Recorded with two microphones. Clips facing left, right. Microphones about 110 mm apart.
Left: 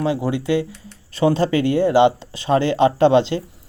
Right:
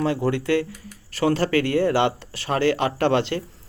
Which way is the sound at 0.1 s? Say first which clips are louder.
Left 1 dB; 15° left (ahead or behind).